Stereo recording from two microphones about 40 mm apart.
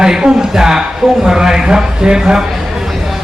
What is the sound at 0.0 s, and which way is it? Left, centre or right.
Speech, centre.